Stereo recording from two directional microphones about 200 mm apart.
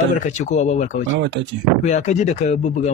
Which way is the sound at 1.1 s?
60° right (ahead or behind).